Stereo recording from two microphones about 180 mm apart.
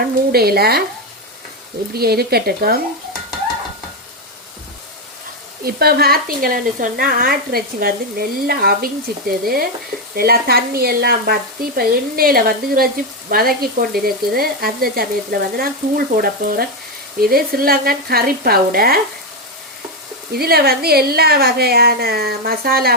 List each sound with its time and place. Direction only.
0.0 s speech: 60° right (ahead or behind)
1.9 s speech: 60° right (ahead or behind)
5.6 s speech: 60° right (ahead or behind)
10.2 s speech: 60° right (ahead or behind)
20.3 s speech: 60° right (ahead or behind)